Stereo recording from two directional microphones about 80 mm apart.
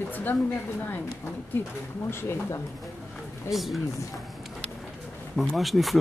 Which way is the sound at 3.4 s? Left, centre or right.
Centre.